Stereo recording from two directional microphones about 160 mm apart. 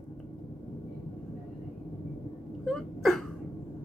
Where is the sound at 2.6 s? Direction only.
Centre (ahead or behind).